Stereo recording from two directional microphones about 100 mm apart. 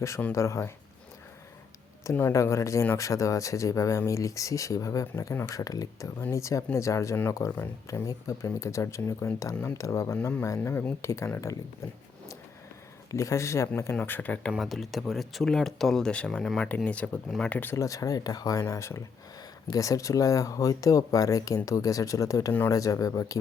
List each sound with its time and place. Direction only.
0.3 s speech: 30° left (ahead or behind)
2.3 s speech: 30° left (ahead or behind)
6.1 s speech: 25° left (ahead or behind)
13.1 s speech: 30° left (ahead or behind)
13.9 s speech: 15° left (ahead or behind)
14.5 s speech: centre (ahead or behind); by 17.7 s 15° left (ahead or behind)
17.7 s speech: 35° left (ahead or behind)